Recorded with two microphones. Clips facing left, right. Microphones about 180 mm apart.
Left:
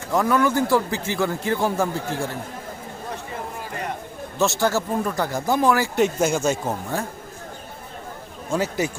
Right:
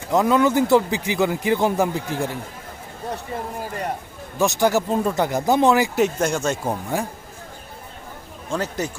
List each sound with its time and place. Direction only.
0.1 s a man's voice: 20° right (ahead or behind)
4.4 s speech: 15° right (ahead or behind)
6.0 s speech: 5° left (ahead or behind)
6.9 s a man's voice: 15° right (ahead or behind)
8.4 s a man's voice: 5° left (ahead or behind)